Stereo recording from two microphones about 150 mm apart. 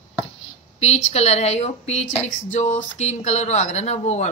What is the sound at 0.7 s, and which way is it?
Speech, 45° left (ahead or behind).